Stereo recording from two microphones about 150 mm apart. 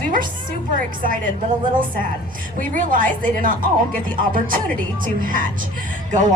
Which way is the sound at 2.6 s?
65° right (ahead or behind).